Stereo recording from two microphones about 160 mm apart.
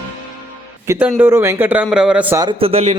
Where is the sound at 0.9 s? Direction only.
15° right (ahead or behind).